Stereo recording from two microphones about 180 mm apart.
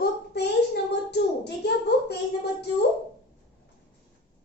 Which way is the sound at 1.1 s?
65° left (ahead or behind).